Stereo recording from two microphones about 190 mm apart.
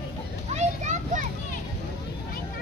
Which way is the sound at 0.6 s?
40° right (ahead or behind).